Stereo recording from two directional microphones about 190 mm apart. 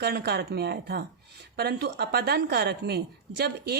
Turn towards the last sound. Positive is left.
turn(degrees=-55)  # may be behind; listen again after turning